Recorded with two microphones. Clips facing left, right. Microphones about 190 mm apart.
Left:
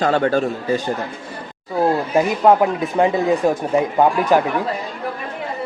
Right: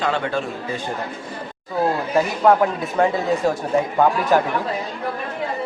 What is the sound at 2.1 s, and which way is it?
Speech, 15° left (ahead or behind).